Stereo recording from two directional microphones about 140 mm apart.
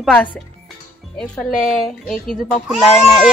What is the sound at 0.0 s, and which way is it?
Speech, 5° left (ahead or behind).